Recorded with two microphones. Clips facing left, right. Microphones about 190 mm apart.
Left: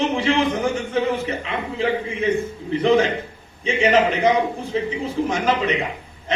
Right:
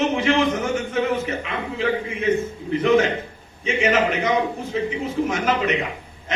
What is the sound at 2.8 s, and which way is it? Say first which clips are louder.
A man's voice: left 1 dB; 30° left (ahead or behind).